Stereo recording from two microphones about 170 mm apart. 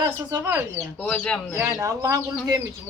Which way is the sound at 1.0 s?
5° left (ahead or behind).